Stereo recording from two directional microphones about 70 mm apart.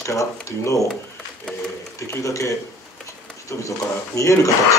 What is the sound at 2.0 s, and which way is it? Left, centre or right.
Speech, left.